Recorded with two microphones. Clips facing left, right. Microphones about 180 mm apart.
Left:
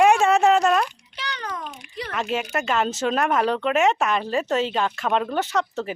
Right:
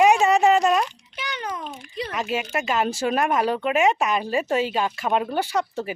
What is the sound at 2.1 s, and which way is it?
Speech, 5° right (ahead or behind).